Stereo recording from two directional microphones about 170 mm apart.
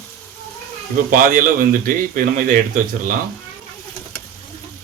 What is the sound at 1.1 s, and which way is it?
Speech, 55° right (ahead or behind).